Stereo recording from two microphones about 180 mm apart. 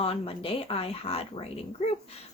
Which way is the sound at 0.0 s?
30° left (ahead or behind).